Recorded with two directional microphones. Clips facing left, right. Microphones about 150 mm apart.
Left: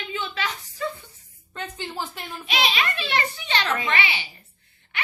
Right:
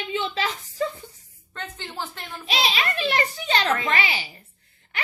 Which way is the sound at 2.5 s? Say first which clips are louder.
Even; 35° right (ahead or behind).